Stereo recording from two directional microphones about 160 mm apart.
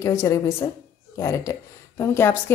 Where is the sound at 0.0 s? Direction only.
20° left (ahead or behind).